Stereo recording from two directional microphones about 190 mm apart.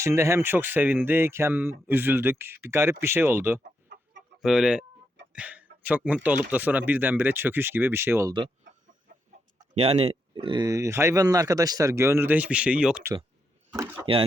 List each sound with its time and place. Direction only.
0.0 s speech: 15° right (ahead or behind)
5.3 s a sound: 5° right (ahead or behind)
6.0 s speech: centre (ahead or behind)
6.2 s speech: 10° right (ahead or behind)
9.7 s speech: 35° right (ahead or behind); by 13.1 s 5° right (ahead or behind)
14.0 s speech: 30° right (ahead or behind)